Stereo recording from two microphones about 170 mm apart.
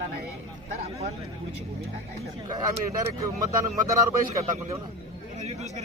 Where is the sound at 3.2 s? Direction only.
20° right (ahead or behind).